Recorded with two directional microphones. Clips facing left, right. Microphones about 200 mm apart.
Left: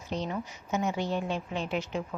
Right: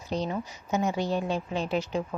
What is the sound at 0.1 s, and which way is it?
A woman's voice, 35° right (ahead or behind).